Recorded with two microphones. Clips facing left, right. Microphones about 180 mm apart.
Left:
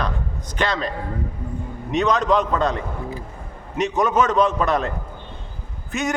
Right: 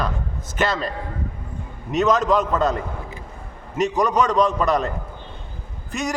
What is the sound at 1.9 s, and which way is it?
A man's voice, centre (ahead or behind).